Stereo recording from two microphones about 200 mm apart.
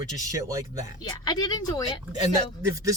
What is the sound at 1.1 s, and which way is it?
Speech, 20° left (ahead or behind).